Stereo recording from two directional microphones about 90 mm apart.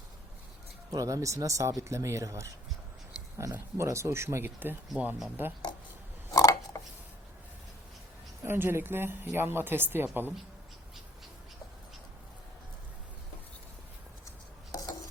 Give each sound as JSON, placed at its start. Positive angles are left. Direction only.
{"t": 0.9, "sound": "speech", "side_deg": -40}
{"t": 3.5, "sound": "a woman's voice", "side_deg": -30}
{"t": 6.3, "sound": "a sound", "side_deg": 35}
{"t": 8.4, "sound": "a woman's voice", "side_deg": -25}
{"t": 14.3, "sound": "chopping", "side_deg": 40}